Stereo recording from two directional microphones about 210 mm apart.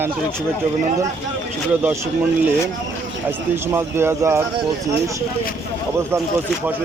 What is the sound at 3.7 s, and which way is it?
Speech, 10° right (ahead or behind).